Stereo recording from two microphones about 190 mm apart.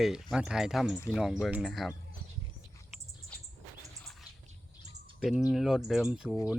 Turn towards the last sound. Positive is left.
turn(degrees=0)  # may be behind; listen again after turning